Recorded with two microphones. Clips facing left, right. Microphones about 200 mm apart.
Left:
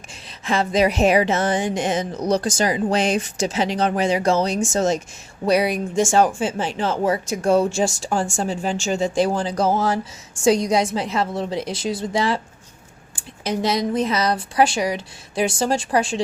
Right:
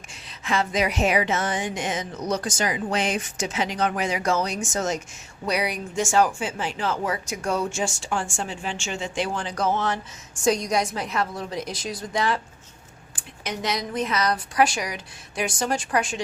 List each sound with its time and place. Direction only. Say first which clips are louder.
0.3 s a sound: left 4 dB; 30° left (ahead or behind)
10.4 s a woman's voice: left 5 dB; 25° left (ahead or behind)
13.4 s a woman's voice: left 7 dB; 30° left (ahead or behind)